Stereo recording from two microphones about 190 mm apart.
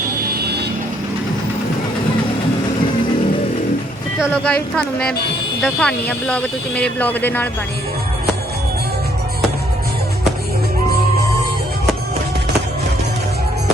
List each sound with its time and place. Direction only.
0.3 s vehicle: 60° right (ahead or behind)
4.3 s speech: 5° left (ahead or behind)